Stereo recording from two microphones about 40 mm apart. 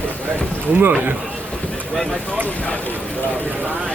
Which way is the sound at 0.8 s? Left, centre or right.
Right.